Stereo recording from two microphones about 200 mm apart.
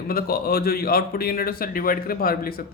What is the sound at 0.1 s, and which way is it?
Speech, 50° left (ahead or behind).